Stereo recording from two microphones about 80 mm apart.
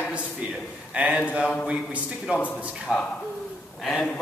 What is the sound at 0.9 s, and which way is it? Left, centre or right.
A man's voice, centre.